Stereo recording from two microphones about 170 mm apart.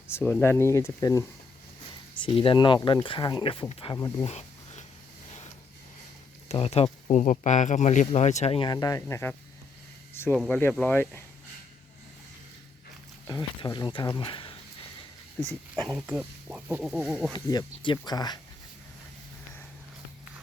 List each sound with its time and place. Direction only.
0.1 s speech: 15° left (ahead or behind)
2.1 s speech: 30° left (ahead or behind)
3.9 s speech: 20° left (ahead or behind)
4.3 s a sound: 40° left (ahead or behind)
6.5 s speech: 40° left (ahead or behind); by 9.3 s 15° left (ahead or behind)
10.3 s speech: centre (ahead or behind)
13.2 s speech: 20° left (ahead or behind)
15.9 s speech: 10° right (ahead or behind)
17.3 s speech: 25° left (ahead or behind)